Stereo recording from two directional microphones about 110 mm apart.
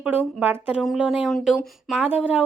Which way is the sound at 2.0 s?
15° right (ahead or behind).